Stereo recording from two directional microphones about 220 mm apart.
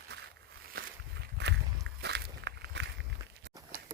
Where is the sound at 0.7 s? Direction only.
50° right (ahead or behind).